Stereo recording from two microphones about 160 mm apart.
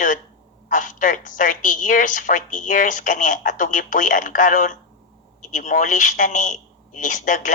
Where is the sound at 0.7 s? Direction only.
55° left (ahead or behind).